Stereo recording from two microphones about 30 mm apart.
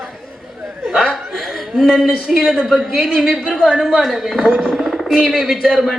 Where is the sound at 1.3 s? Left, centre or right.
Centre.